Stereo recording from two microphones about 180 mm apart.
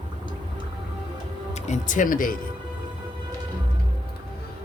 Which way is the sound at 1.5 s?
45° left (ahead or behind).